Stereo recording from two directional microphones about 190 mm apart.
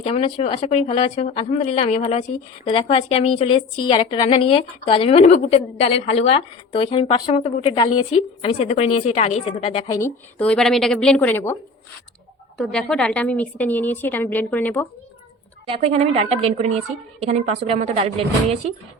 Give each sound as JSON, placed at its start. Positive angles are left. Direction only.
{"t": 0.0, "sound": "a woman's voice", "side_deg": 30}
{"t": 9.9, "sound": "a woman's voice", "side_deg": 10}
{"t": 12.5, "sound": "a woman's voice", "side_deg": 0}
{"t": 15.6, "sound": "a woman's voice", "side_deg": -30}